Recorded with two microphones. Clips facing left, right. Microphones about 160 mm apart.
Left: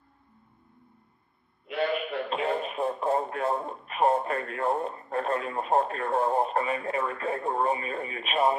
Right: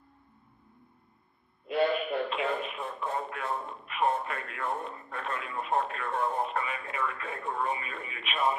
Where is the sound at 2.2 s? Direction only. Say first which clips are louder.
Left 3 dB; 40° left (ahead or behind).